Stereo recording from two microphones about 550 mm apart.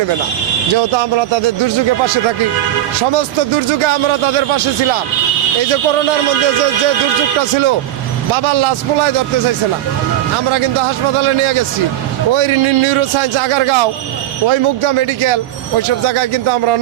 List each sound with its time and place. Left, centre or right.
12.4 s a man's voice: right